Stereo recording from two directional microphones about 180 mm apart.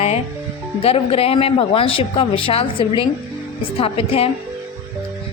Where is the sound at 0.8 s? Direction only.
35° left (ahead or behind).